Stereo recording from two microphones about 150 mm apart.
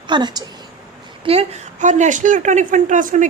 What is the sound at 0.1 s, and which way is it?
Speech, 30° right (ahead or behind).